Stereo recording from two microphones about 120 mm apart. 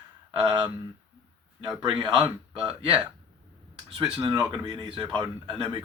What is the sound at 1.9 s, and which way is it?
Speech, 40° right (ahead or behind).